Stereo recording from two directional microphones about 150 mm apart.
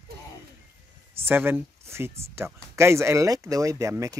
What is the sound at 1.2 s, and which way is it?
Speech, 15° right (ahead or behind).